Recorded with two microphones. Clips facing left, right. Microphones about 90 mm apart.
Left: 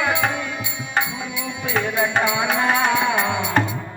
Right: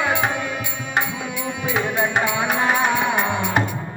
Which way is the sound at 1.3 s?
50° right (ahead or behind).